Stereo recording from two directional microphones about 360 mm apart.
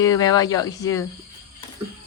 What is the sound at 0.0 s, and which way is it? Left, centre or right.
A woman's voice, centre.